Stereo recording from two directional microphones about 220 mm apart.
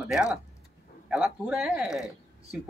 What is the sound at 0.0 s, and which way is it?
Speech, 5° right (ahead or behind).